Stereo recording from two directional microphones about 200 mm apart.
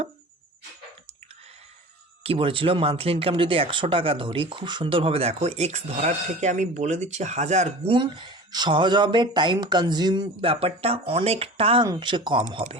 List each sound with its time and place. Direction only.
2.2 s speech: 25° right (ahead or behind)